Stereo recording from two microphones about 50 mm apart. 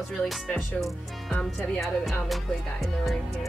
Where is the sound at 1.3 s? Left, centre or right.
Centre.